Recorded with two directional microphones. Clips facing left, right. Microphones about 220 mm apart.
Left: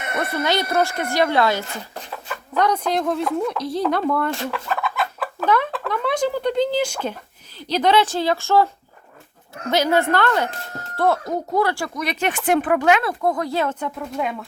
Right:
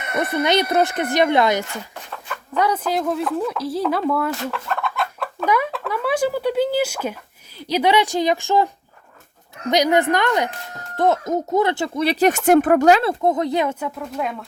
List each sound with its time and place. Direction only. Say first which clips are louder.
0.2 s speech: right 4 dB; 20° right (ahead or behind)
2.6 s speech: even; 5° right (ahead or behind); by 13.0 s 40° right (ahead or behind)
13.0 s speech: right 3 dB; 25° right (ahead or behind); by 14.4 s centre (ahead or behind)